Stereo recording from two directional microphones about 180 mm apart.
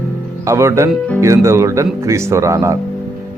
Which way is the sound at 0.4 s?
15° right (ahead or behind).